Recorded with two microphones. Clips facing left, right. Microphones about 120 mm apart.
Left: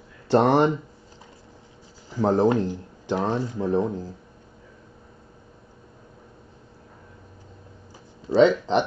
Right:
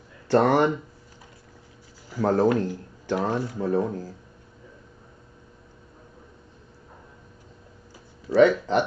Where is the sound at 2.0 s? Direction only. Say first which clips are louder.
Left 1 dB; 20° left (ahead or behind).